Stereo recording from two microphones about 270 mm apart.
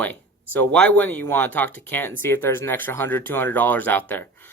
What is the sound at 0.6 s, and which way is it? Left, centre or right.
Speech, centre.